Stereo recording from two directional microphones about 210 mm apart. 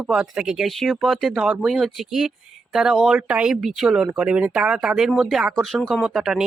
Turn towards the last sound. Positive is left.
turn(degrees=0)  # may be behind; listen again after turning